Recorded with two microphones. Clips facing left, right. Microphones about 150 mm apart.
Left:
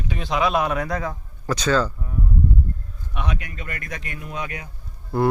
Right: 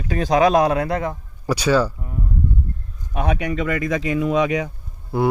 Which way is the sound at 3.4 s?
85° right.